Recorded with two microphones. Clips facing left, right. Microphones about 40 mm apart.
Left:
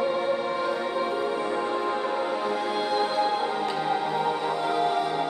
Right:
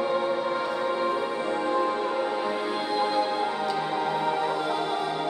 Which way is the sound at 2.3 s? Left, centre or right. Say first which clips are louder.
Left 1 dB; centre.